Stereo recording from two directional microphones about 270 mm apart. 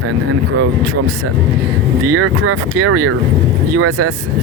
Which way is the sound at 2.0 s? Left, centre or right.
Right.